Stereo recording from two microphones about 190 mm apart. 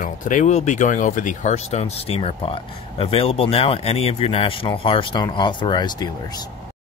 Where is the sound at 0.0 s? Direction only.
45° left (ahead or behind).